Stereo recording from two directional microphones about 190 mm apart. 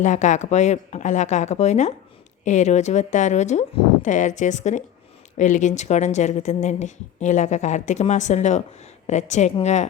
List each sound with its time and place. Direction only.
0.0 s a woman's voice: 40° left (ahead or behind)